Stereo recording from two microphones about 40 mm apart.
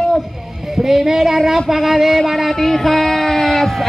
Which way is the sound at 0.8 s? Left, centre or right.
Centre.